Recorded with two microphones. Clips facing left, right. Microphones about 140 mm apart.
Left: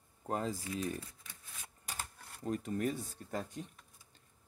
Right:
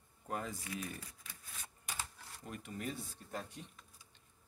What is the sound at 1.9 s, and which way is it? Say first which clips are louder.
Speech: left 1 dB; 40° left (ahead or behind).